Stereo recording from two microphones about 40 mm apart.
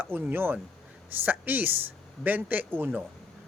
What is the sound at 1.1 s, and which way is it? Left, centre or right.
Speech, right.